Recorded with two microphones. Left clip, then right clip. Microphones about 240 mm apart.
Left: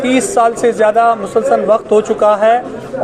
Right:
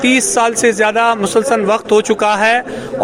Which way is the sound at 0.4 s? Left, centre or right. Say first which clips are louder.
Left 2 dB; right.